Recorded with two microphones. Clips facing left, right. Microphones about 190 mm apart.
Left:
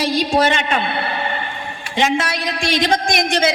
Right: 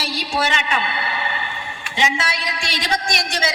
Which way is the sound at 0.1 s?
50° left (ahead or behind).